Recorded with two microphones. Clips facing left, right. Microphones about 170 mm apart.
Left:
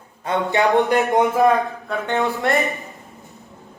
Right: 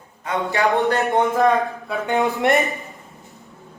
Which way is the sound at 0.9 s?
15° left (ahead or behind).